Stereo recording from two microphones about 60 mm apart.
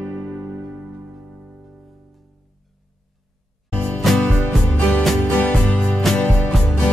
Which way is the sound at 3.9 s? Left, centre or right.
Centre.